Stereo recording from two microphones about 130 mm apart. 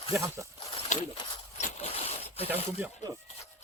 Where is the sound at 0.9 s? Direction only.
65° left (ahead or behind).